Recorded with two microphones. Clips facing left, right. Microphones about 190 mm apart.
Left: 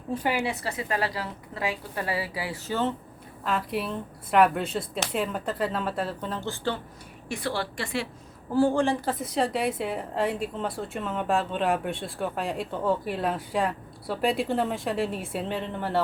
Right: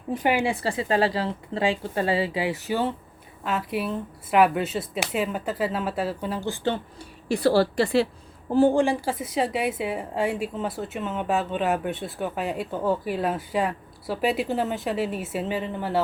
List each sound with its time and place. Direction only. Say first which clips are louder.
0.1 s a woman's voice: right 4 dB; 20° right (ahead or behind)
3.4 s a woman's voice: right 1 dB; centre (ahead or behind)
7.3 s a woman's voice: right 10 dB; 35° right (ahead or behind)
8.4 s a woman's voice: right 3 dB; 20° right (ahead or behind); by 16.0 s 5° right (ahead or behind)